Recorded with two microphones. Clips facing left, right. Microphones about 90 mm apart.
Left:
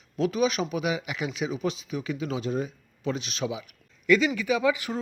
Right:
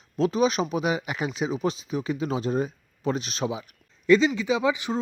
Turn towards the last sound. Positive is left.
turn(degrees=-20)  # may be behind; listen again after turning